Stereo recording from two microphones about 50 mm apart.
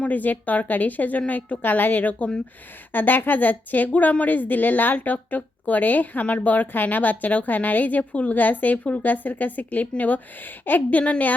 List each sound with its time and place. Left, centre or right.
0.0 s a woman's voice: left